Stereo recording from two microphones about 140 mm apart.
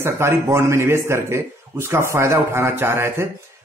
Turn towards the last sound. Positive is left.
turn(degrees=-20)  # may be behind; listen again after turning